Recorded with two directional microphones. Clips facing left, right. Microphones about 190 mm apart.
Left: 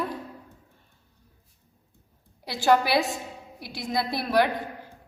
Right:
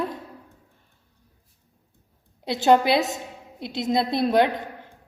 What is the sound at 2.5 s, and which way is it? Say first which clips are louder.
A woman's voice: right 4 dB; 20° right (ahead or behind).